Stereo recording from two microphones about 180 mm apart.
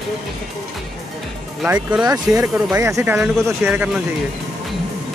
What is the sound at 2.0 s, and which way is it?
Speech, 20° right (ahead or behind).